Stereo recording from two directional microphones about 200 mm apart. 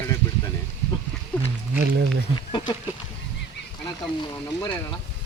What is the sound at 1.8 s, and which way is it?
Speech, 60° right (ahead or behind).